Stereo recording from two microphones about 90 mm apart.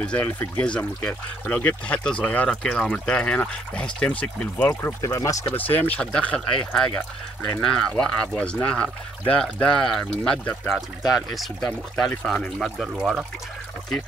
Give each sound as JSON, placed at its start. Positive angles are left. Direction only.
{"t": 0.0, "sound": "speech", "side_deg": 15}
{"t": 5.0, "sound": "speech", "side_deg": 35}
{"t": 5.6, "sound": "speech", "side_deg": 20}
{"t": 10.4, "sound": "speech", "side_deg": 20}
{"t": 10.7, "sound": "speech", "side_deg": -5}
{"t": 12.9, "sound": "speech", "side_deg": -10}